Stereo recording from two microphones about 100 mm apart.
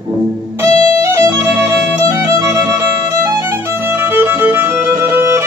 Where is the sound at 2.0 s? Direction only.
30° right (ahead or behind).